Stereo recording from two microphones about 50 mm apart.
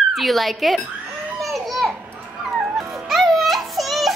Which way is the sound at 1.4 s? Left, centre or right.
Centre.